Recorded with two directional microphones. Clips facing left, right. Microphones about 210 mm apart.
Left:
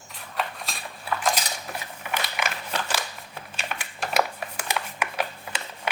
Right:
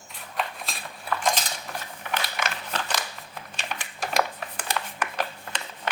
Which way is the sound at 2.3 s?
10° left (ahead or behind).